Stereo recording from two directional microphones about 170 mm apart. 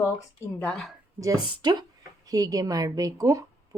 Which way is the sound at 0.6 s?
10° left (ahead or behind).